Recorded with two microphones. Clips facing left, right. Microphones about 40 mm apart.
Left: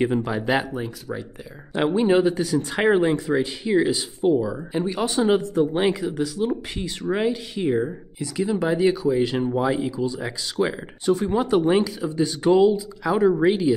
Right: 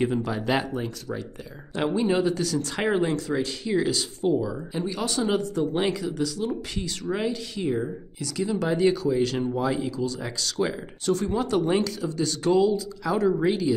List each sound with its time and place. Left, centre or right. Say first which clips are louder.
0.0 s speech: left 3 dB; centre
1.8 s speech: left 5 dB; left